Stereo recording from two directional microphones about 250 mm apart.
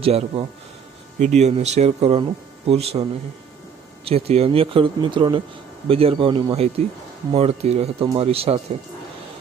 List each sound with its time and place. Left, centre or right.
0.0 s speech: right